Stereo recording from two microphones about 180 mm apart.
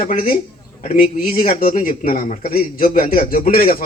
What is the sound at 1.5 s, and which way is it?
A man's voice, 50° left (ahead or behind).